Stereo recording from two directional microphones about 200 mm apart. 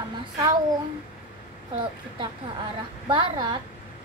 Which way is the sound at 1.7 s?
25° right (ahead or behind).